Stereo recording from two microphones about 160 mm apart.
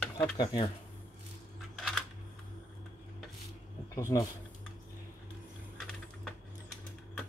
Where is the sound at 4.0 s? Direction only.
20° left (ahead or behind).